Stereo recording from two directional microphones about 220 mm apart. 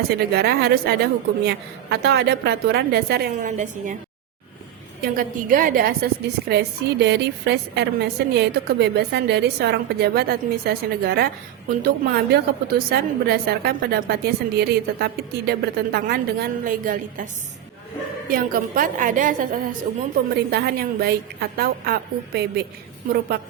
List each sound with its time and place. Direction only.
0.3 s a woman's voice: 45° right (ahead or behind)
5.0 s a woman's voice: 40° right (ahead or behind)
18.3 s a woman's voice: 40° right (ahead or behind)